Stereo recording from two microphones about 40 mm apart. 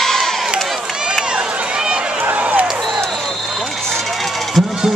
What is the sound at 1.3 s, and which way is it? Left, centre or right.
Run, right.